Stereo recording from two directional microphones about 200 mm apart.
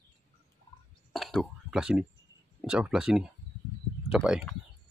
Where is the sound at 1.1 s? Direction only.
Centre (ahead or behind).